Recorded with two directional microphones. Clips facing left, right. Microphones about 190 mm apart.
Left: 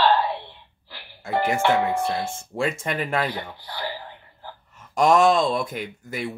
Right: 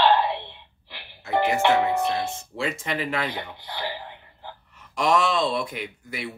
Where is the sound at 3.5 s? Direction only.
15° right (ahead or behind).